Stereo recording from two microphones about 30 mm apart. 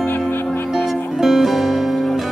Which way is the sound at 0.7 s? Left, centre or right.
Centre.